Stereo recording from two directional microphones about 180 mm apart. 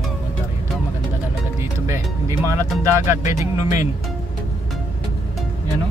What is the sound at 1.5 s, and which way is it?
Music, 15° right (ahead or behind).